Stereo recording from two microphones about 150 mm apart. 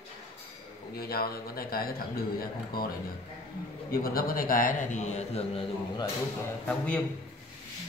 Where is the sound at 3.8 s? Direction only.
75° left (ahead or behind); by 5.6 s 45° left (ahead or behind).